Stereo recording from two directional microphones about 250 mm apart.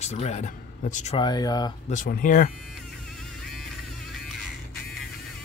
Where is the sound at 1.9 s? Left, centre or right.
Left.